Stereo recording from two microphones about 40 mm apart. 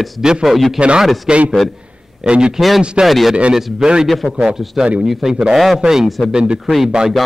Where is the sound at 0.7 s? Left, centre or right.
Right.